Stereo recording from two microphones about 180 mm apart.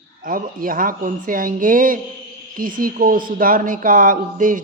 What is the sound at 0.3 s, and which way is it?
Speech, 50° right (ahead or behind).